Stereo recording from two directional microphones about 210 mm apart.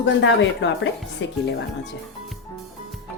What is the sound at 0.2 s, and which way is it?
Speech, 60° left (ahead or behind).